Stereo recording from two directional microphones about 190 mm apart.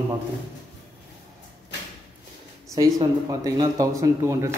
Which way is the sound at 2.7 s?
15° right (ahead or behind).